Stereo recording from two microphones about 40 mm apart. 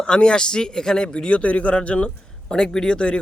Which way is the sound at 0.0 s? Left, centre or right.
Left.